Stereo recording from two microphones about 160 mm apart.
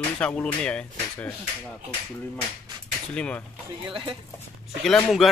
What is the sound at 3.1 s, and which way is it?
Speech, 5° left (ahead or behind).